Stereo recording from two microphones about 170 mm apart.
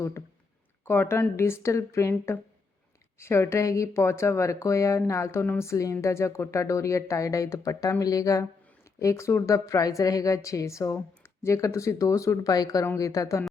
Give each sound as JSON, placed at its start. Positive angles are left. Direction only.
{"t": 0.9, "sound": "speech", "side_deg": 15}